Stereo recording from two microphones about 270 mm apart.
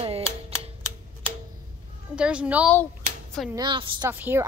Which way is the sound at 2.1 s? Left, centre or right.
Centre.